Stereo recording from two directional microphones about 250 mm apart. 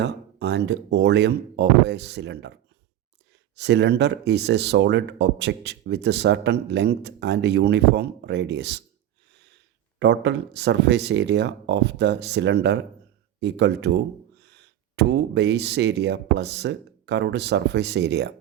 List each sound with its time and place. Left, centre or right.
0.0 s speech: right
3.5 s speech: right
9.3 s a sound: right
10.0 s speech: right